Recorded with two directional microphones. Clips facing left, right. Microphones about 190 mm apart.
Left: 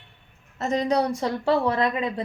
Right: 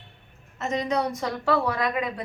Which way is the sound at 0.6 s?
35° left (ahead or behind).